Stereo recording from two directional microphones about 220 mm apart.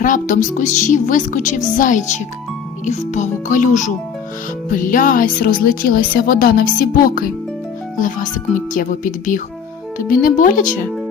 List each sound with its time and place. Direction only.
0.0 s speech: 35° left (ahead or behind)